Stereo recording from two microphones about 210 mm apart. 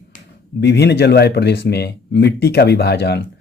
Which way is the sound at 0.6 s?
55° left (ahead or behind).